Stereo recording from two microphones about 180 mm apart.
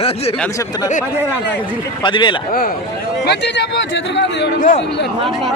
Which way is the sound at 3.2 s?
70° left (ahead or behind).